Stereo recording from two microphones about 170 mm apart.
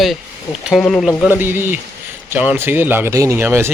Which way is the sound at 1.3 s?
10° right (ahead or behind).